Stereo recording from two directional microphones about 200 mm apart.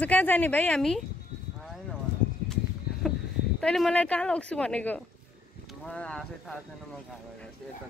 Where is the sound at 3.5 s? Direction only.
Centre (ahead or behind).